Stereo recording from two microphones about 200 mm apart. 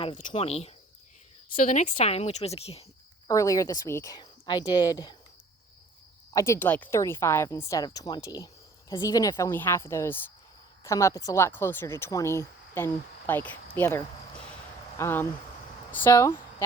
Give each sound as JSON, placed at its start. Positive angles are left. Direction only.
{"t": 0.2, "sound": "a woman's voice", "side_deg": 35}
{"t": 3.2, "sound": "speech", "side_deg": 15}
{"t": 6.3, "sound": "speech", "side_deg": 15}